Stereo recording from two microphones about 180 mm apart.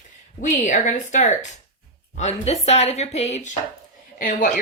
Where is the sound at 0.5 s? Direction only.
45° left (ahead or behind).